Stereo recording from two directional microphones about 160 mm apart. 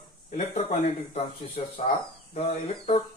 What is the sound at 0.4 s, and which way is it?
Speech, 45° left (ahead or behind).